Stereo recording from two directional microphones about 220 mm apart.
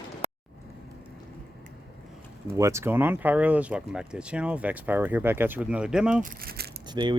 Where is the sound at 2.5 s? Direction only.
15° right (ahead or behind).